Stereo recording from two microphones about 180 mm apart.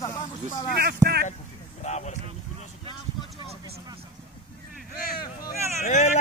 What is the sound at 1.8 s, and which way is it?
Speech, 40° left (ahead or behind).